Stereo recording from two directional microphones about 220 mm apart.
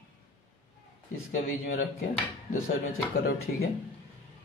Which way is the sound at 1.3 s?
40° left (ahead or behind).